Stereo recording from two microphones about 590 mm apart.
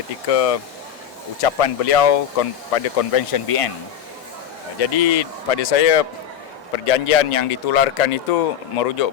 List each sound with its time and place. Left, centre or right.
0.3 s speech: left
4.8 s speech: left